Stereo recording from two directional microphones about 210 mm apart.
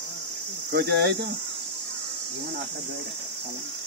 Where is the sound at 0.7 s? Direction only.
50° right (ahead or behind).